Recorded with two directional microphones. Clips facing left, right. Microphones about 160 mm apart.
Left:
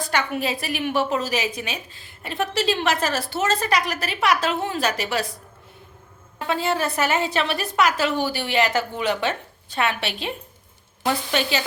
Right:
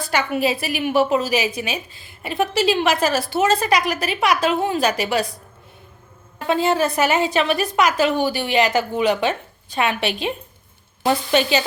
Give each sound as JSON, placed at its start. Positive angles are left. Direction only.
{"t": 0.0, "sound": "a woman's voice", "side_deg": -10}
{"t": 6.5, "sound": "a woman's voice", "side_deg": -20}